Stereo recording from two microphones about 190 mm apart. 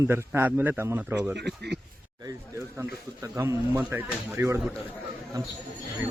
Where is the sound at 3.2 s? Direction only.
15° right (ahead or behind).